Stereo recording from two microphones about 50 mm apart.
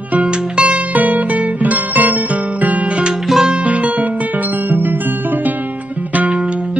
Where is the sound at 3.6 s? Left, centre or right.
Right.